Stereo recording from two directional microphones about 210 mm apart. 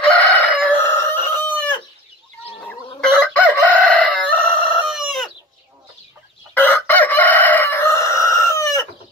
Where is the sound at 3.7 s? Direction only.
5° left (ahead or behind).